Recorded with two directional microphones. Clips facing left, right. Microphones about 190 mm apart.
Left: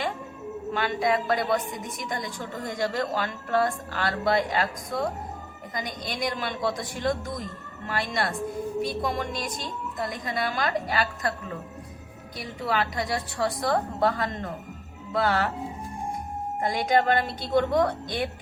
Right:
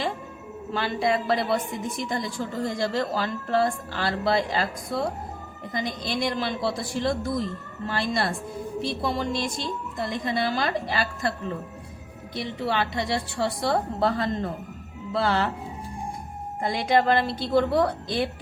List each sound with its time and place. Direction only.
0.7 s a woman's voice: 30° right (ahead or behind)
2.6 s a woman's voice: 30° right (ahead or behind)
12.4 s a woman's voice: 25° right (ahead or behind)
16.6 s a woman's voice: 30° right (ahead or behind)